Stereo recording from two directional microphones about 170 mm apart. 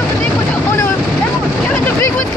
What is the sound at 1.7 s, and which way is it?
Vehicle, 10° left (ahead or behind).